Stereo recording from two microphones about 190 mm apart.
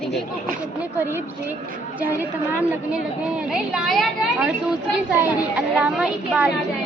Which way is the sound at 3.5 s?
5° right (ahead or behind).